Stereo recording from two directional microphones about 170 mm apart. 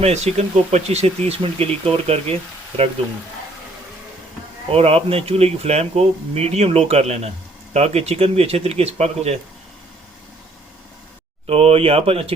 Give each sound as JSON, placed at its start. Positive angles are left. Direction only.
{"t": 0.0, "sound": "speech", "side_deg": -40}
{"t": 4.7, "sound": "speech", "side_deg": -35}
{"t": 11.4, "sound": "speech", "side_deg": -35}